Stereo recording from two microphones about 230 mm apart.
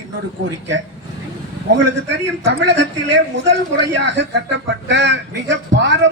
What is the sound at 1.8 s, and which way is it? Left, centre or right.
Speech, right.